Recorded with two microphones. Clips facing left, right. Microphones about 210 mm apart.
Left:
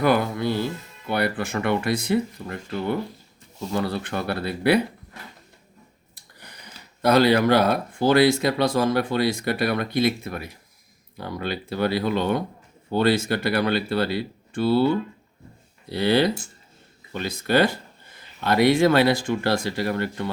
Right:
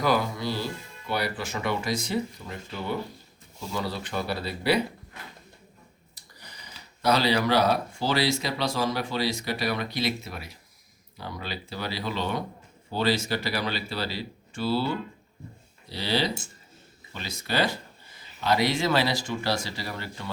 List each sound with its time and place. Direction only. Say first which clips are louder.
0.0 s music: left 5 dB; 60° left (ahead or behind)
1.0 s speech: left 5 dB; 55° left (ahead or behind)
6.1 s a sound: left 3 dB; 55° left (ahead or behind)
7.0 s speech: left 6 dB; 55° left (ahead or behind)
15.9 s speech: left 8 dB; 55° left (ahead or behind)